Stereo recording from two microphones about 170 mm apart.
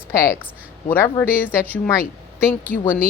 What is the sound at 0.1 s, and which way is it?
Speech, 15° left (ahead or behind).